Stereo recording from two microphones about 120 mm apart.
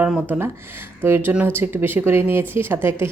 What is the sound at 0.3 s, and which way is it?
Speech, 20° right (ahead or behind).